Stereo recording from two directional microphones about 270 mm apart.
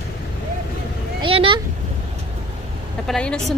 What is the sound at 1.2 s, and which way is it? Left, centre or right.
Speech, centre.